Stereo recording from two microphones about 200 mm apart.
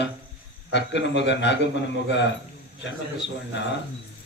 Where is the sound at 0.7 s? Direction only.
60° left (ahead or behind).